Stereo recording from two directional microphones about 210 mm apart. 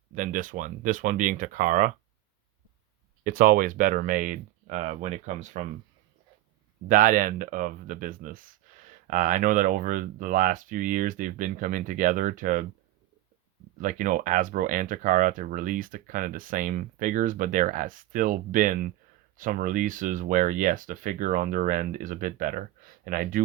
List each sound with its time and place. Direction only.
0.1 s speech: 40° right (ahead or behind)
3.2 s speech: 40° right (ahead or behind)
6.8 s speech: 40° right (ahead or behind)
13.8 s speech: 40° right (ahead or behind)